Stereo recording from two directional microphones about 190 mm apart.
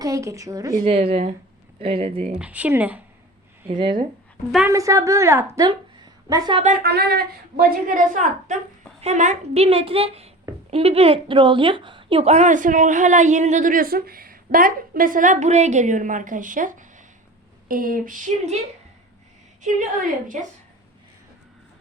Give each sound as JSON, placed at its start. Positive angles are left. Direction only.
{"t": 0.0, "sound": "a woman's voice", "side_deg": -15}
{"t": 0.9, "sound": "a woman's voice", "side_deg": -35}
{"t": 2.3, "sound": "a woman's voice", "side_deg": -5}
{"t": 3.8, "sound": "a woman's voice", "side_deg": -25}
{"t": 6.6, "sound": "a woman's voice", "side_deg": -40}
{"t": 6.8, "sound": "a woman's voice", "side_deg": -55}
{"t": 17.7, "sound": "a sound", "side_deg": -50}
{"t": 20.3, "sound": "a woman's voice", "side_deg": -40}